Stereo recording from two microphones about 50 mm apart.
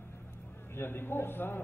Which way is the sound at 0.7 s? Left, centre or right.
Left.